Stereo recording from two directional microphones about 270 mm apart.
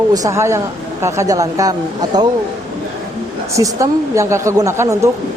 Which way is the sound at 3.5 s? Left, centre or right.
Centre.